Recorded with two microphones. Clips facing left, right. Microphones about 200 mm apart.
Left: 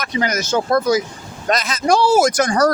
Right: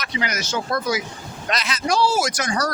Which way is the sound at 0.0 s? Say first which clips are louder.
Left 6 dB; 45° left (ahead or behind).